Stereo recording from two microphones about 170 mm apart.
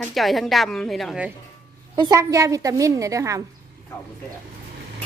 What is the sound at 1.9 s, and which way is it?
A woman's voice, 25° right (ahead or behind).